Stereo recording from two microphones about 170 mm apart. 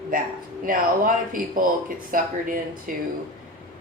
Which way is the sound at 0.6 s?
55° right (ahead or behind).